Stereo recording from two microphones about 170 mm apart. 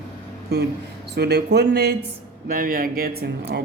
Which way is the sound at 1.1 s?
80° right.